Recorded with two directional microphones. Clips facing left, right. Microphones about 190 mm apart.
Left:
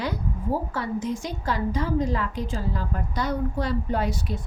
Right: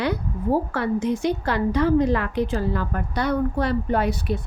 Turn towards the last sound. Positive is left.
turn(degrees=-65)  # may be behind; listen again after turning